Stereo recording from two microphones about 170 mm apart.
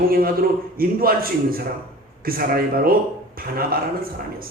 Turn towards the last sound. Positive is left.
turn(degrees=-60)  # may be behind; listen again after turning